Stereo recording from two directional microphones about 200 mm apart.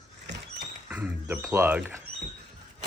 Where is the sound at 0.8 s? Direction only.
10° right (ahead or behind).